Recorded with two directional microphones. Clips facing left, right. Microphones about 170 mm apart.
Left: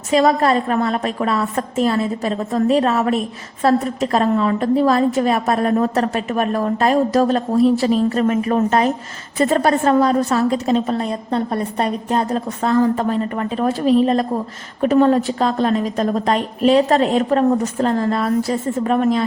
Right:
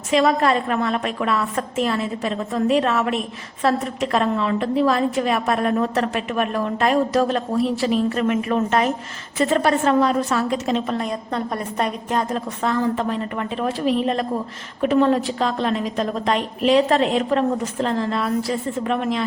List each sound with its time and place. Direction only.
0.1 s a woman's voice: 35° left (ahead or behind)